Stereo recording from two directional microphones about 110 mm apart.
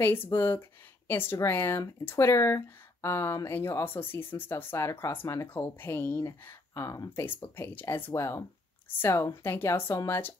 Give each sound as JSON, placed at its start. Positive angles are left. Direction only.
{"t": 0.0, "sound": "speech", "side_deg": 20}